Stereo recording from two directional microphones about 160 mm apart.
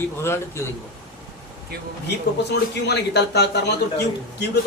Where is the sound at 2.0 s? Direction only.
90° left.